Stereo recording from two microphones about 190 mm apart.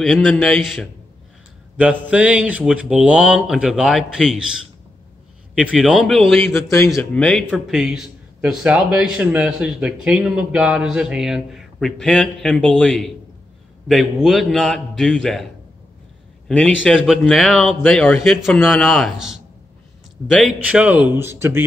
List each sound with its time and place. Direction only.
0.0 s a man's voice: centre (ahead or behind)
6.5 s a man's voice: 15° left (ahead or behind)
6.9 s a man's voice: 5° left (ahead or behind)
16.4 s a man's voice: 5° left (ahead or behind); by 21.6 s 15° right (ahead or behind)